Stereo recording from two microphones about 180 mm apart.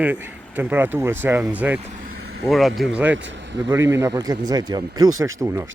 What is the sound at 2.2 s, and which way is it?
Vehicle, 65° right (ahead or behind).